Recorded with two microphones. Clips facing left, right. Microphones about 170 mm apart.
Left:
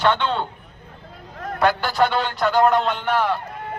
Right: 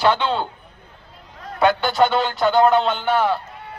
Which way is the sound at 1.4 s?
70° left (ahead or behind).